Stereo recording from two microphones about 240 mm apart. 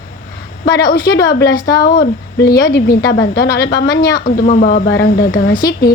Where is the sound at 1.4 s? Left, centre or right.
Left.